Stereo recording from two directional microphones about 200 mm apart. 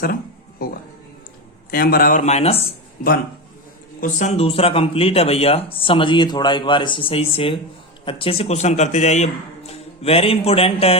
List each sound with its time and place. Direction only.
1.7 s speech: 45° left (ahead or behind); by 2.7 s 30° left (ahead or behind)
4.0 s a man's voice: 35° left (ahead or behind)